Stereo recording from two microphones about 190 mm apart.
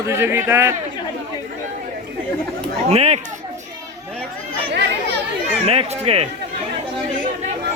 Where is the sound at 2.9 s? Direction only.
35° right (ahead or behind).